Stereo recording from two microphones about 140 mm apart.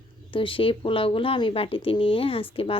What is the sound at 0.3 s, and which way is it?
Speech, 40° left (ahead or behind).